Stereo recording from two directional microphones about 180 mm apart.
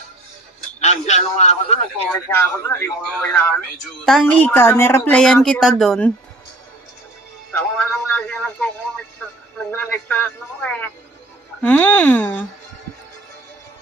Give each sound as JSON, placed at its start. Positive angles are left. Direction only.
{"t": 0.8, "sound": "a man's voice", "side_deg": 40}
{"t": 2.1, "sound": "speech", "side_deg": 10}
{"t": 7.5, "sound": "music", "side_deg": 10}
{"t": 9.7, "sound": "a man's voice", "side_deg": 10}